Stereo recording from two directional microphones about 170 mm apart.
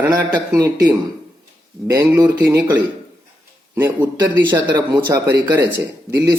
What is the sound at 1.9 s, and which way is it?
Speech, 20° right (ahead or behind).